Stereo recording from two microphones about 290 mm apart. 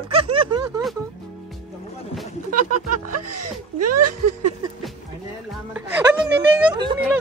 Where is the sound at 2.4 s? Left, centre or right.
Right.